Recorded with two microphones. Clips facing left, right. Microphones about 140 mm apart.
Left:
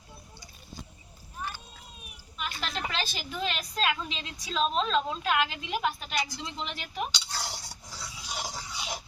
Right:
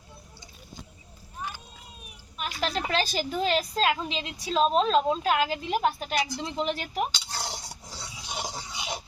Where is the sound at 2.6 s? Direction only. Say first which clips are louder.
Right 7 dB; 40° right (ahead or behind).